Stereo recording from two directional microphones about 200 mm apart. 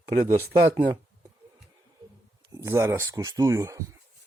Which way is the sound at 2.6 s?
15° right (ahead or behind).